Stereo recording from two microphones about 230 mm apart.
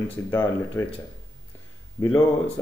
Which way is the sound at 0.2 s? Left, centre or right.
Centre.